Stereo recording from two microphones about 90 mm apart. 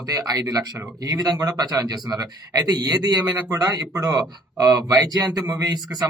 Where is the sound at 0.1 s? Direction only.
40° right (ahead or behind).